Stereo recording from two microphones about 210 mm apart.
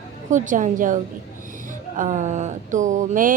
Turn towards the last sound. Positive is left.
turn(degrees=-40)  # may be behind; listen again after turning